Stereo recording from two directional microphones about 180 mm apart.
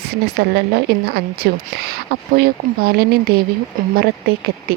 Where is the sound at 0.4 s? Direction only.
65° right (ahead or behind).